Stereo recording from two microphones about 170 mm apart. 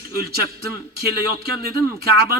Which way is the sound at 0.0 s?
65° right (ahead or behind).